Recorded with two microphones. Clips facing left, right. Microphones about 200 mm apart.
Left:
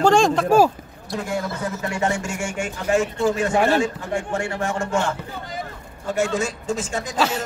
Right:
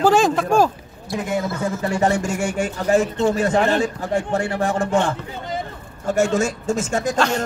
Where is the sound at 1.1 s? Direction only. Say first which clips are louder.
Right 3 dB; 20° right (ahead or behind).